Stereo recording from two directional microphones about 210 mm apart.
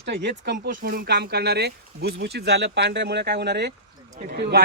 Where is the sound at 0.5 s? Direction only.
40° right (ahead or behind).